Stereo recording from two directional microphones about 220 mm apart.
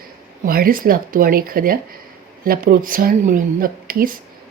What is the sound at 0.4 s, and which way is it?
Speech, 40° right (ahead or behind).